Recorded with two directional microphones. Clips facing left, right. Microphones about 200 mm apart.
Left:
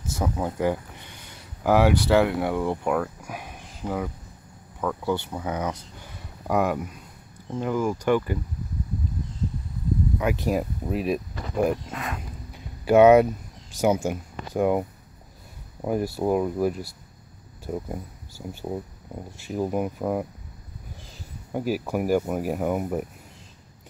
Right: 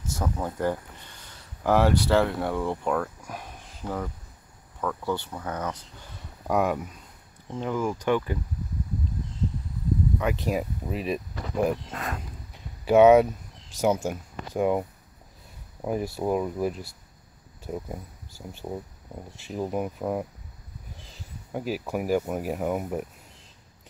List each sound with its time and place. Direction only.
0.2 s speech: 10° left (ahead or behind)
6.4 s speech: centre (ahead or behind)
10.1 s speech: 5° left (ahead or behind)
11.9 s speech: 45° right (ahead or behind)
12.5 s a sound: centre (ahead or behind)
13.7 s speech: centre (ahead or behind)
21.5 s speech: centre (ahead or behind)